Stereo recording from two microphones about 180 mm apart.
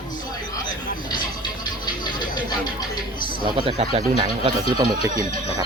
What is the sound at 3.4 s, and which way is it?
Speech, 30° right (ahead or behind).